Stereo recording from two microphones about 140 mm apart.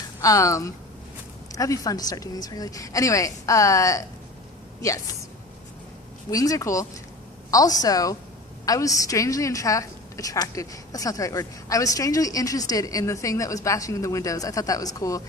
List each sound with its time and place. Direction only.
0.2 s a woman's voice: 25° left (ahead or behind)
6.3 s a woman's voice: 25° left (ahead or behind)